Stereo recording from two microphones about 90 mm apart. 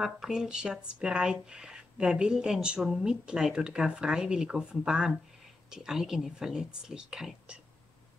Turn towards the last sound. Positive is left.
turn(degrees=-5)  # may be behind; listen again after turning